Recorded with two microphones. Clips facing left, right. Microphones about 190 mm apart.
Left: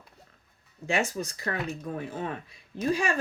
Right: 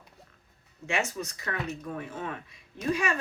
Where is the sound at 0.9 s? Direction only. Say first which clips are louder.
Left 3 dB; 35° left (ahead or behind).